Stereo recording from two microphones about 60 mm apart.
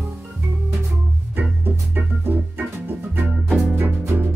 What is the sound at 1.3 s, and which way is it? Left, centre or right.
Music, right.